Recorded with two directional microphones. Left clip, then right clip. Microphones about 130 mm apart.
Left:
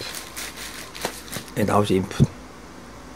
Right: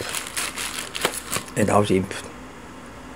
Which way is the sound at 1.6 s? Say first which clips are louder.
Right 1 dB; centre (ahead or behind).